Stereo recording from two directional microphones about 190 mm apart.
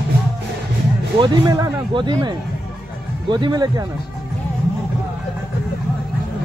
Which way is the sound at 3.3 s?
20° right (ahead or behind).